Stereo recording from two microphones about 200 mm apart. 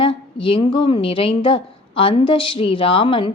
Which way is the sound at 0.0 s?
25° left (ahead or behind).